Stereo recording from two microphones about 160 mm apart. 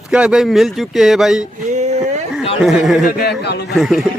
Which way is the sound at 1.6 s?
45° right (ahead or behind).